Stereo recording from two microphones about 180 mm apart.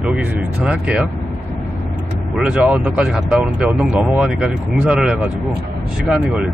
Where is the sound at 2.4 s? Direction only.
5° right (ahead or behind).